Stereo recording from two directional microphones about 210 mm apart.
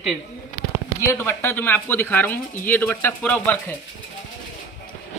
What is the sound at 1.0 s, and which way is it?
Speech, 10° left (ahead or behind).